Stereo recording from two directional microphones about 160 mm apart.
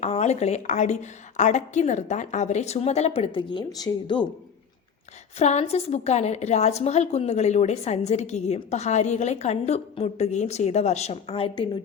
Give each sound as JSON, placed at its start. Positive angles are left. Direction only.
{"t": 0.0, "sound": "a woman's voice", "side_deg": 45}
{"t": 5.4, "sound": "a woman's voice", "side_deg": 45}